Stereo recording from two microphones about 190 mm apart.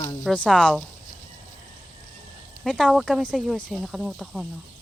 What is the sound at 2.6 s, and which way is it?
Speech, centre (ahead or behind).